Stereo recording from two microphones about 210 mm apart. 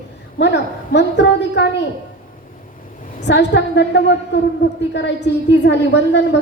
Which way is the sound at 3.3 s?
55° left (ahead or behind).